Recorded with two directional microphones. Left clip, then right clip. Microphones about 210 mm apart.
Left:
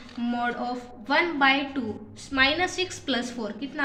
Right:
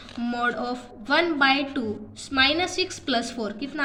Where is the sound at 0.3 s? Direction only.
30° right (ahead or behind).